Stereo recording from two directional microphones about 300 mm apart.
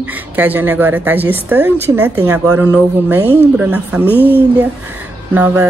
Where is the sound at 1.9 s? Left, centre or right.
Right.